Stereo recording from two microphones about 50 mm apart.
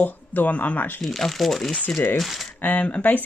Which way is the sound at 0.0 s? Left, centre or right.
Left.